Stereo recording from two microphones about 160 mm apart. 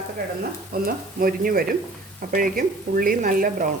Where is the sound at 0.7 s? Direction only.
75° right (ahead or behind).